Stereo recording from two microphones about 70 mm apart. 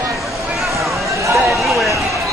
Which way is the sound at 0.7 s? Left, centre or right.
Right.